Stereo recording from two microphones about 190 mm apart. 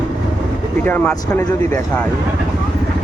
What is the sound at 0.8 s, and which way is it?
Speech, 10° left (ahead or behind).